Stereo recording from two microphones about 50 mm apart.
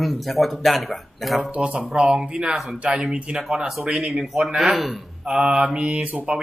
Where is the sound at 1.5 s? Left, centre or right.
Right.